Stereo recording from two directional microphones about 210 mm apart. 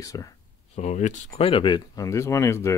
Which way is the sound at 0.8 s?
35° left (ahead or behind).